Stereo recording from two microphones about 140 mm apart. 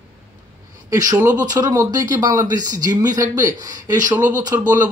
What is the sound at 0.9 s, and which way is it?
Speech, 25° right (ahead or behind).